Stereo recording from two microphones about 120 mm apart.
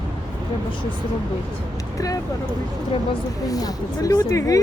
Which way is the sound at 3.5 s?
30° left (ahead or behind).